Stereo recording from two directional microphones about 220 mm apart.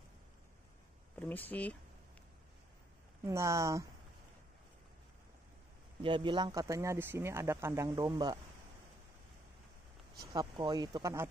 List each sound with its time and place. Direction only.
1.2 s speech: 10° left (ahead or behind)
3.3 s speech: 15° right (ahead or behind)
6.0 s speech: 20° right (ahead or behind)
10.3 s speech: 20° right (ahead or behind)